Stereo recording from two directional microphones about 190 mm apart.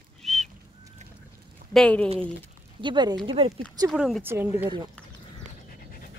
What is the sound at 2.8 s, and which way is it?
Speech, 25° right (ahead or behind).